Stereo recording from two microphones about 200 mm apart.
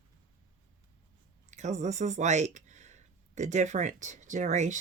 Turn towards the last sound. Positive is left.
turn(degrees=-35)  # may be behind; listen again after turning